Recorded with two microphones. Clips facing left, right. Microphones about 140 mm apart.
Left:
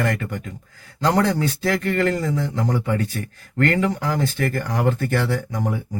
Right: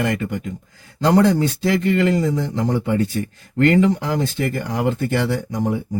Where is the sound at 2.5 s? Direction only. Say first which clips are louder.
Right 3 dB; 25° right (ahead or behind).